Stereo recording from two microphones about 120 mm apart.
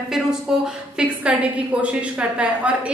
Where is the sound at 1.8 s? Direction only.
10° right (ahead or behind).